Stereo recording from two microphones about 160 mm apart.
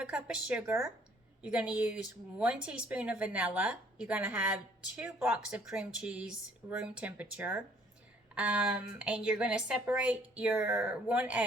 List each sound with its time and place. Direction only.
0.0 s speech: 5° right (ahead or behind)